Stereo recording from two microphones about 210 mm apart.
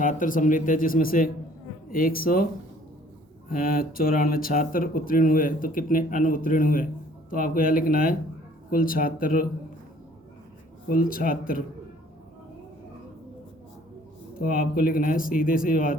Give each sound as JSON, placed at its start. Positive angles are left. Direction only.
{"t": 0.0, "sound": "speech", "side_deg": 40}
{"t": 3.5, "sound": "speech", "side_deg": 40}
{"t": 10.8, "sound": "speech", "side_deg": 40}
{"t": 14.3, "sound": "speech", "side_deg": 40}